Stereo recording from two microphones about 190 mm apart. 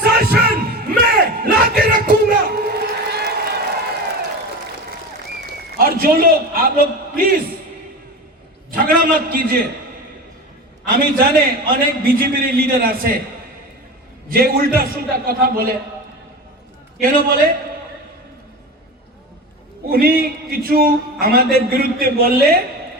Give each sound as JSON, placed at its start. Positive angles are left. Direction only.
{"t": 0.0, "sound": "bellow", "side_deg": -55}
{"t": 1.4, "sound": "a sound", "side_deg": -50}
{"t": 5.7, "sound": "a man's voice", "side_deg": -50}
{"t": 8.7, "sound": "a man's voice", "side_deg": -50}
{"t": 10.9, "sound": "a man's voice", "side_deg": -50}
{"t": 14.3, "sound": "a man's voice", "side_deg": -50}
{"t": 17.0, "sound": "a man's voice", "side_deg": -50}
{"t": 19.9, "sound": "a man's voice", "side_deg": -50}